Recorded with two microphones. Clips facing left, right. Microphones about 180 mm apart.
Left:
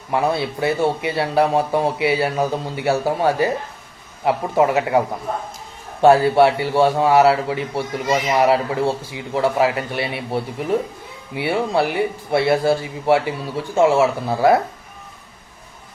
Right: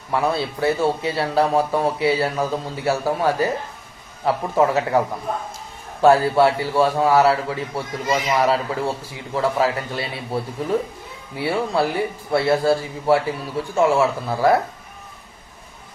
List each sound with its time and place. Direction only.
0.1 s a man's voice: 20° left (ahead or behind)